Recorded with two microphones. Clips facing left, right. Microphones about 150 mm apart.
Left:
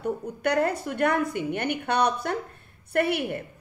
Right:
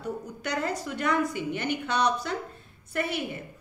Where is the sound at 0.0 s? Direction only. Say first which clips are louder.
Left 6 dB; 55° left (ahead or behind).